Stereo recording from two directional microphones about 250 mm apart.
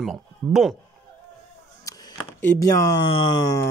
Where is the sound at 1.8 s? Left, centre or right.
Centre.